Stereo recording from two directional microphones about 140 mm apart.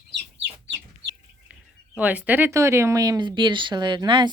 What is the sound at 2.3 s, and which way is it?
Speech, 15° right (ahead or behind).